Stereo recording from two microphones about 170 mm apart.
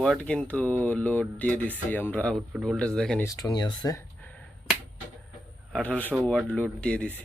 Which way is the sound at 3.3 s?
20° left (ahead or behind).